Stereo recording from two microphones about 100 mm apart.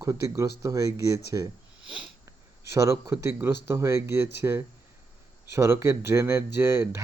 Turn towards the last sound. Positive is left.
turn(degrees=-25)  # may be behind; listen again after turning